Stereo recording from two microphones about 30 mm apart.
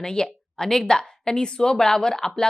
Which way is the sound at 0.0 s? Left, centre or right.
Left.